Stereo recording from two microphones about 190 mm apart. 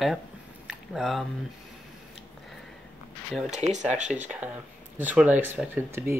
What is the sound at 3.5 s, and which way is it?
Speech, 35° right (ahead or behind).